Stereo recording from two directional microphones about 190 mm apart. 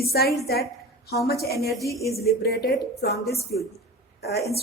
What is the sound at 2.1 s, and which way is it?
A woman's voice, 55° left (ahead or behind).